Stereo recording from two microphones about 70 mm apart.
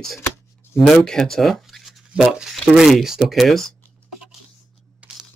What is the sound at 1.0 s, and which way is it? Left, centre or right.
Speech, centre.